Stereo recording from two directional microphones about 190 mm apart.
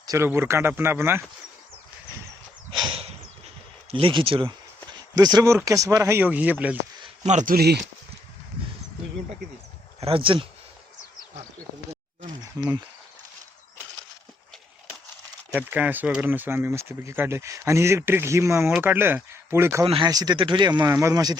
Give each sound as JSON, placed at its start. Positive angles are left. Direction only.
{"t": 0.0, "sound": "speech", "side_deg": -15}
{"t": 2.7, "sound": "a sound", "side_deg": -30}
{"t": 3.9, "sound": "speech", "side_deg": -30}
{"t": 7.3, "sound": "speech", "side_deg": -40}
{"t": 7.5, "sound": "speech", "side_deg": -60}
{"t": 10.0, "sound": "speech", "side_deg": -30}
{"t": 12.4, "sound": "cricket", "side_deg": -20}
{"t": 15.5, "sound": "speech", "side_deg": -10}
{"t": 19.8, "sound": "speech", "side_deg": -25}